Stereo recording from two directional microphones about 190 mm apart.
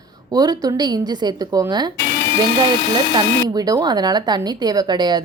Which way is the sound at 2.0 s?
55° left (ahead or behind).